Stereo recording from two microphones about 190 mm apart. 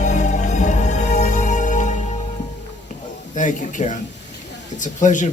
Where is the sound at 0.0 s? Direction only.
40° left (ahead or behind).